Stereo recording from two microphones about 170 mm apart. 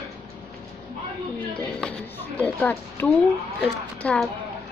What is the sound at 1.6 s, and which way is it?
Music, 5° left (ahead or behind).